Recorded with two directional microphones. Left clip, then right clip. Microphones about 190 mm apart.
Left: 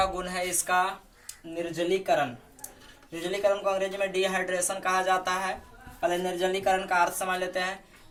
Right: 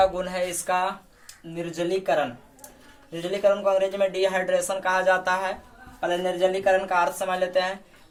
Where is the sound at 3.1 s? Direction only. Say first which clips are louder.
Right 4 dB; 40° right (ahead or behind).